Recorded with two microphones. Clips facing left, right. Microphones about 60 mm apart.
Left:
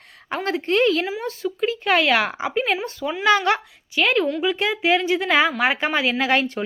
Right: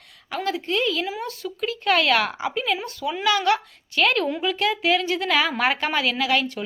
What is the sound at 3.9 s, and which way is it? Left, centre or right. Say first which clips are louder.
A woman's voice: left 1 dB; centre.